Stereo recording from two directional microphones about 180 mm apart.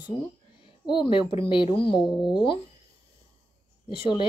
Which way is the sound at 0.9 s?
25° left (ahead or behind).